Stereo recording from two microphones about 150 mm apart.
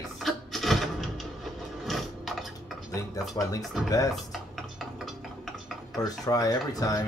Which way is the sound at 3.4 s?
25° left (ahead or behind).